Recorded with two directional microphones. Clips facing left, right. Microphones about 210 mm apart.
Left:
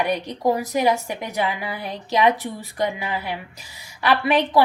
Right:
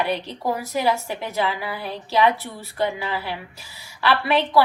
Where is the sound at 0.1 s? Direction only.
15° left (ahead or behind).